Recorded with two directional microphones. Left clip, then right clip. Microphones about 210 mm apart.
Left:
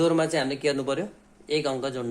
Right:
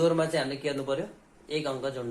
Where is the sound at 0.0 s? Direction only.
50° left (ahead or behind).